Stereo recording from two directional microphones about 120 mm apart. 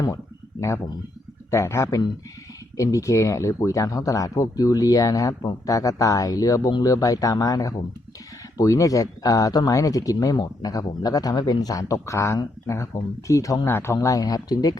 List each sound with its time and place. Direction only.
0.6 s speech: 25° left (ahead or behind)